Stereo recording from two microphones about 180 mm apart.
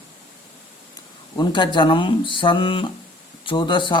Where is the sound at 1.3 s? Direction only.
25° left (ahead or behind).